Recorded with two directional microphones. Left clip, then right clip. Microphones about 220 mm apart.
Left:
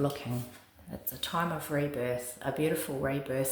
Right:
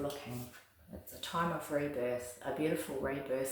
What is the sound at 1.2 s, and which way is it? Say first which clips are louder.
Speech: left 3 dB; 35° left (ahead or behind).